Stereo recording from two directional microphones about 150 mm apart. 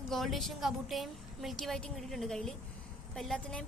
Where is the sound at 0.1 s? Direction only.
Centre (ahead or behind).